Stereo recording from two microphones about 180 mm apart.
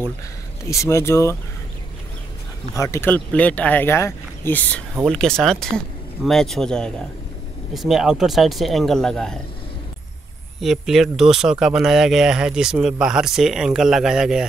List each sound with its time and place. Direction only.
0.7 s speech: 15° left (ahead or behind)
2.7 s speech: 15° left (ahead or behind)
10.6 s speech: centre (ahead or behind)